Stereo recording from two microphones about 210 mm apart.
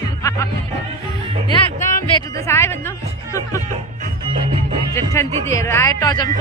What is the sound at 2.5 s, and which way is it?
Speech, 10° left (ahead or behind).